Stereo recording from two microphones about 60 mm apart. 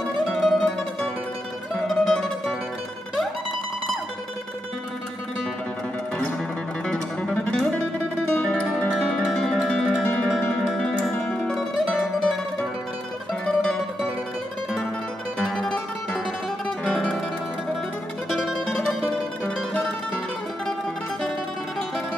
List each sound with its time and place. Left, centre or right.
0.3 s music: centre
7.3 s music: left
8.3 s guitar: centre
8.9 s music: centre
13.5 s music: centre
15.3 s music: centre
18.3 s music: centre
18.7 s music: centre